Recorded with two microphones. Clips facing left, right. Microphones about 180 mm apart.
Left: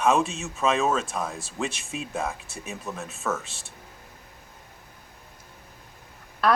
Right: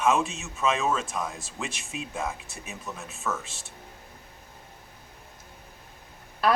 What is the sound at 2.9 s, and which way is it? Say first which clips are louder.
Speech: left 3 dB; 50° left (ahead or behind).